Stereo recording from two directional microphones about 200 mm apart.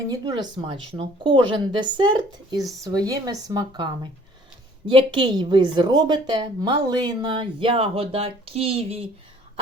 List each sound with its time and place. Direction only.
0.1 s a woman's voice: 20° right (ahead or behind)
2.6 s speech: centre (ahead or behind)
2.8 s a woman's voice: 20° right (ahead or behind)